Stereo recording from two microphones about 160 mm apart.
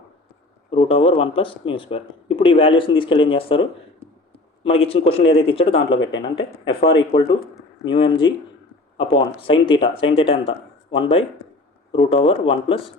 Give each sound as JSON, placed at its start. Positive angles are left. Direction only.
{"t": 0.7, "sound": "speech", "side_deg": 35}